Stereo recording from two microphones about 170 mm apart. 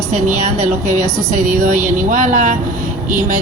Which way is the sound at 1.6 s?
50° right (ahead or behind).